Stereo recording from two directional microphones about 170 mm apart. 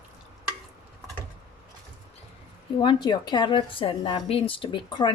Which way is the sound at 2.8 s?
25° left (ahead or behind).